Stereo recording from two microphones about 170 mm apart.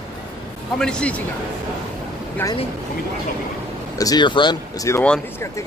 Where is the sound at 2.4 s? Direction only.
15° left (ahead or behind).